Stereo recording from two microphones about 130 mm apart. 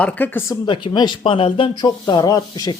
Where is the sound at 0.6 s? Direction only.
40° left (ahead or behind).